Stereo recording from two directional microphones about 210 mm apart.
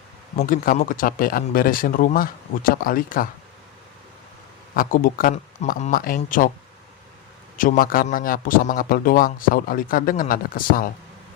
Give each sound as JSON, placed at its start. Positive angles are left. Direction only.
{"t": 0.3, "sound": "a man's voice", "side_deg": 40}
{"t": 4.7, "sound": "a man's voice", "side_deg": 40}
{"t": 7.5, "sound": "a man's voice", "side_deg": 40}